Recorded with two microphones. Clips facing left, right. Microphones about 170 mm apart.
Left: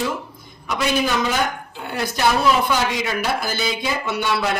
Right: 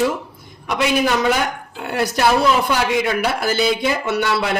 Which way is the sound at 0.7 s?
65° right (ahead or behind).